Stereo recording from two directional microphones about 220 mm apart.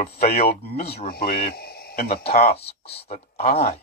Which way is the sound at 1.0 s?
40° left (ahead or behind).